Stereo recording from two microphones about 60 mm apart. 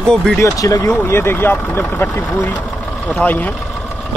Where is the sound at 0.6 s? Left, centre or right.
Left.